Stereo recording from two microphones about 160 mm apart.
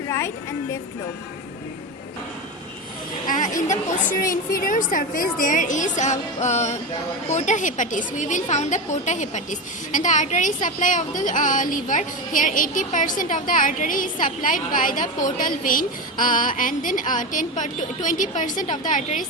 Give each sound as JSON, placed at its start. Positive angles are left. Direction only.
{"t": 3.2, "sound": "a woman's voice", "side_deg": 55}